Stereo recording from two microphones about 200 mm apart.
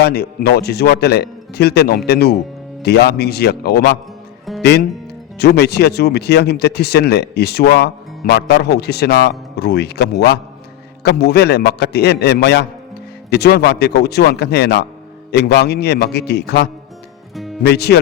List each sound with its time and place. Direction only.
0.0 s speech: 55° left (ahead or behind)
17.3 s music: centre (ahead or behind)
17.6 s speech: 55° left (ahead or behind)